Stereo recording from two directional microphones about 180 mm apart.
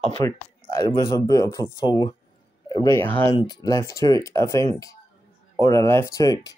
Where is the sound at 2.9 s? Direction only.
10° left (ahead or behind).